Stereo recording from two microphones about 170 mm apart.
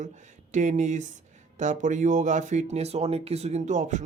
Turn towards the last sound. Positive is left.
turn(degrees=-45)  # may be behind; listen again after turning